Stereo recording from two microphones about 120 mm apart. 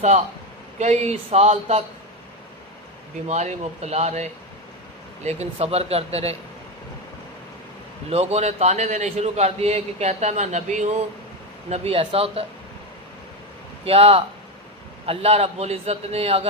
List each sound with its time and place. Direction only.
0.8 s a man's voice: 70° right (ahead or behind)
3.2 s a man's voice: 70° right (ahead or behind)
8.1 s a man's voice: 65° right (ahead or behind); by 10.8 s 80° right
11.7 s a man's voice: 55° right (ahead or behind)
13.8 s a man's voice: 55° right (ahead or behind)